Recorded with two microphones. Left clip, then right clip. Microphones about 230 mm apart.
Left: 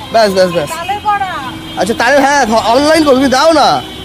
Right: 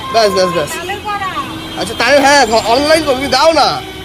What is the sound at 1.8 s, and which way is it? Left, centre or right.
Speech, left.